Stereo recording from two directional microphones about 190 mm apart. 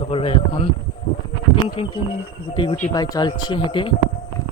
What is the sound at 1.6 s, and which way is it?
A man's voice, 25° left (ahead or behind).